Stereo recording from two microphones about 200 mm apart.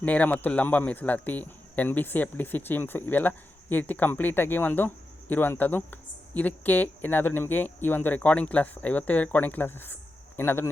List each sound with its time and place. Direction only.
0.0 s speech: 5° left (ahead or behind)